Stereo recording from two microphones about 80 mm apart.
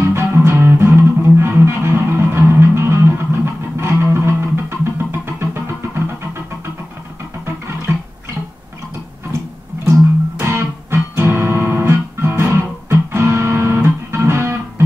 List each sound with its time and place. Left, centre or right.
0.0 s music: right
7.4 s music: right
10.4 s music: right